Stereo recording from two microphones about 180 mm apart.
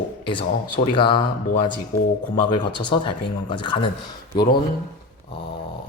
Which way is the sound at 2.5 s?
25° left (ahead or behind).